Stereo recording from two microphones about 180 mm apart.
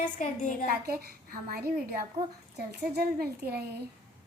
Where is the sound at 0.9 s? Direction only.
55° right (ahead or behind).